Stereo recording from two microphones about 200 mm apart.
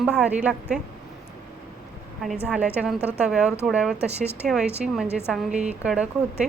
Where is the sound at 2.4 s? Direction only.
5° right (ahead or behind).